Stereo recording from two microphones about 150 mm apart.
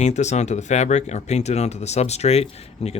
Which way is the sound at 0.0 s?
50° left (ahead or behind).